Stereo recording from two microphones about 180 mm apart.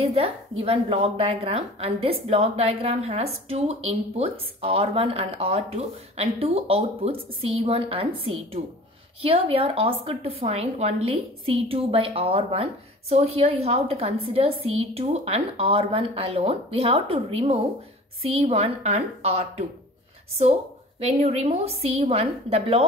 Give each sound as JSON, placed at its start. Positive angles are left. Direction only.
{"t": 0.0, "sound": "a woman's voice", "side_deg": -30}
{"t": 21.0, "sound": "a woman's voice", "side_deg": -35}